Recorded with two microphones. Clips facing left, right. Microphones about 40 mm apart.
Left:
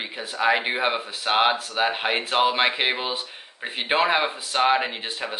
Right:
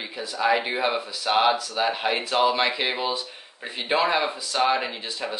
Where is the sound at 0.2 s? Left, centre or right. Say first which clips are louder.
Left 1 dB; left.